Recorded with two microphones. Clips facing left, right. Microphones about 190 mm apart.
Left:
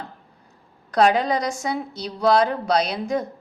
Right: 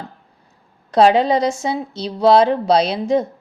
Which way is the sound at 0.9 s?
25° right (ahead or behind).